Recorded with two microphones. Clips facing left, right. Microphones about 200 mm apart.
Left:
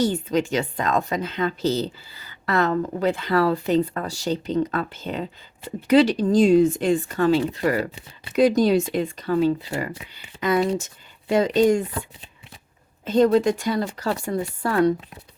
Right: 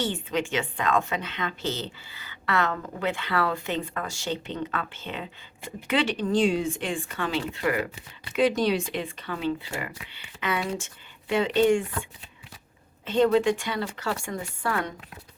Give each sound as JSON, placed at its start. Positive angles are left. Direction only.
{"t": 0.0, "sound": "a woman's voice", "side_deg": 40}
{"t": 13.1, "sound": "a woman's voice", "side_deg": 40}